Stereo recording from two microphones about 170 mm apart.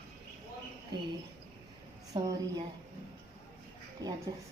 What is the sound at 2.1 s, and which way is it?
Speech, 25° right (ahead or behind).